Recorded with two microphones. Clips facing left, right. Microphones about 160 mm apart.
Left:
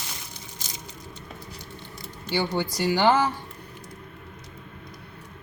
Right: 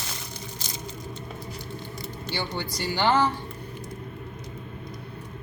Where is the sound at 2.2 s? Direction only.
10° left (ahead or behind).